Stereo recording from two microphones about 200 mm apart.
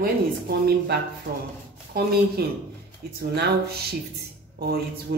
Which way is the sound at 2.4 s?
50° right (ahead or behind).